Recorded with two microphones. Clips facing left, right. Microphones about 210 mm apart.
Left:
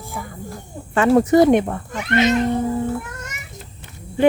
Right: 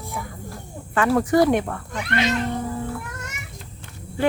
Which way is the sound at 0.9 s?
25° left (ahead or behind).